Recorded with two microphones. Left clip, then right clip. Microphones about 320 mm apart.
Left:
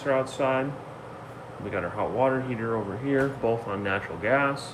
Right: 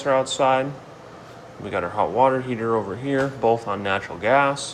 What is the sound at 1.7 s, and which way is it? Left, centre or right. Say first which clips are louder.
Speech: right 7 dB; centre.